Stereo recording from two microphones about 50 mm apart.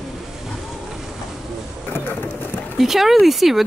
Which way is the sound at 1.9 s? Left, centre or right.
Left.